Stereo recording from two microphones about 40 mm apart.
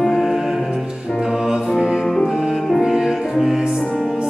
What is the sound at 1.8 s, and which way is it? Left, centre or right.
Music, centre.